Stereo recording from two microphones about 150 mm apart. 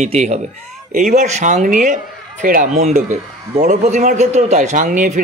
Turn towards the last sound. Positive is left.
turn(degrees=-55)  # may be behind; listen again after turning